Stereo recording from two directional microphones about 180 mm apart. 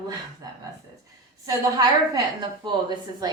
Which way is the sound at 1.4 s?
20° right (ahead or behind).